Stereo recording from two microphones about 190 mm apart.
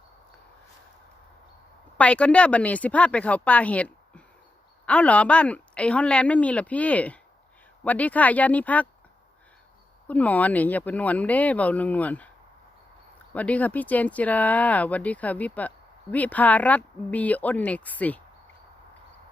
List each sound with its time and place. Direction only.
2.0 s speech: 5° left (ahead or behind)
10.1 s speech: 10° left (ahead or behind)
13.3 s speech: 5° left (ahead or behind)